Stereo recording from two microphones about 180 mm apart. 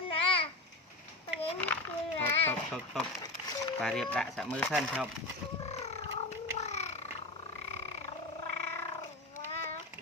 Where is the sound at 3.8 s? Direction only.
5° left (ahead or behind).